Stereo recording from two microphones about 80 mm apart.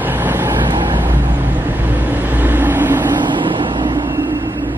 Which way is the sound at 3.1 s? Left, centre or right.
Right.